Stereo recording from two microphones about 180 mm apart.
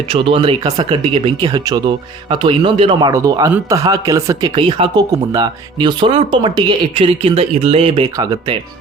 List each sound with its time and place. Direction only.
0.1 s speech: 30° right (ahead or behind)